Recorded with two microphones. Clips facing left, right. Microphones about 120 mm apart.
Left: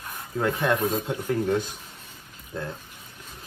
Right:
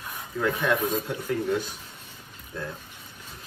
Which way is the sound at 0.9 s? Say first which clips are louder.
Left 2 dB; 15° left (ahead or behind).